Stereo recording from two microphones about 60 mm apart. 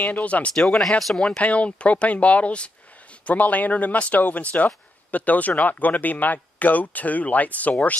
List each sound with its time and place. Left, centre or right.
0.0 s speech: left
0.6 s speech: centre; by 7.7 s left